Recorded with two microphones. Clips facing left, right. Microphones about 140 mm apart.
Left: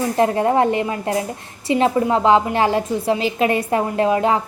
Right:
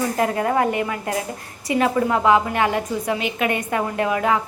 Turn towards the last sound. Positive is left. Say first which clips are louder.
# left 3 dB
turn(degrees=30)  # may be behind; listen again after turning